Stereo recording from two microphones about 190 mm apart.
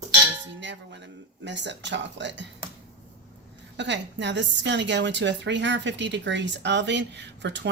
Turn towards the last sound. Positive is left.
turn(degrees=-65)  # may be behind; listen again after turning